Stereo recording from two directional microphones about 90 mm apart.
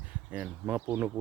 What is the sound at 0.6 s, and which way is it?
Speech, 20° right (ahead or behind).